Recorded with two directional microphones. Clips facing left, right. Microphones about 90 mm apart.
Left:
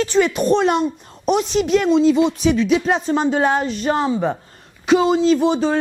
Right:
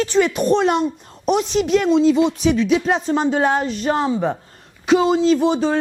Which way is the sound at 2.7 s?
20° left (ahead or behind).